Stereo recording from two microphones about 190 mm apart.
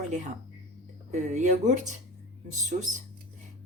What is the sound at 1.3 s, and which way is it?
A woman's voice, 40° right (ahead or behind).